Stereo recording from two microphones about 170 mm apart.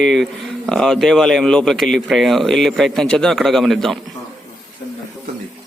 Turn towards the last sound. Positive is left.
turn(degrees=0)  # may be behind; listen again after turning